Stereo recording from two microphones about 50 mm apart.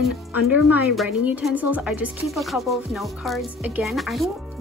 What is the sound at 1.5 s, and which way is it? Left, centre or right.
Speech, right.